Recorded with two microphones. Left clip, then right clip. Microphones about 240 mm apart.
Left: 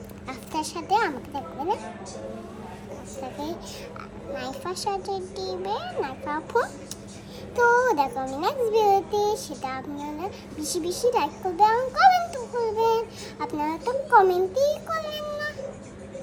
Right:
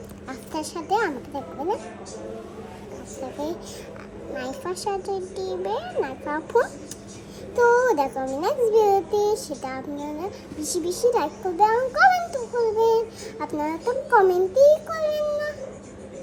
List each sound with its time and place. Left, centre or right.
0.3 s a child's voice: centre
4.4 s a child's voice: centre